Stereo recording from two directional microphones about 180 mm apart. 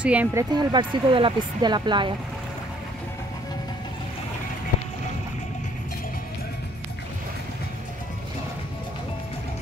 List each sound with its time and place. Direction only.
0.0 s speech: 10° right (ahead or behind); by 2.1 s 25° right (ahead or behind)